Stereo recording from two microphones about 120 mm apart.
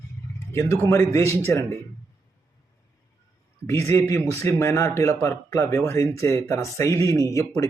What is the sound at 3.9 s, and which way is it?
A man's voice, 25° left (ahead or behind).